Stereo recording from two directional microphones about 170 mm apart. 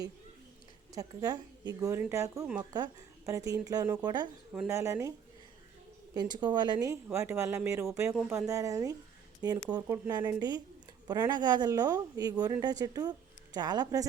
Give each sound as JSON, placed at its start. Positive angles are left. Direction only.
{"t": 0.9, "sound": "speech", "side_deg": -20}
{"t": 4.5, "sound": "speech", "side_deg": -10}
{"t": 6.1, "sound": "a woman's voice", "side_deg": -25}